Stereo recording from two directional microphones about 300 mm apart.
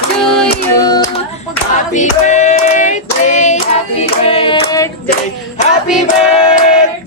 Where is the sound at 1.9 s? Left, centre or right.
Left.